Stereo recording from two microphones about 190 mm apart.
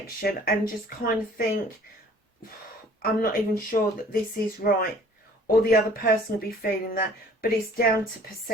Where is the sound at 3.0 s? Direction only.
50° left (ahead or behind).